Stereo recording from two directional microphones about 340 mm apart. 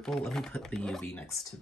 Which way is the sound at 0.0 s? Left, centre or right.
Centre.